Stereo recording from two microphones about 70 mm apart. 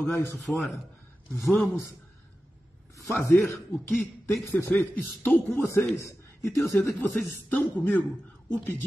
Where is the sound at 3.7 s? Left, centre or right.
Left.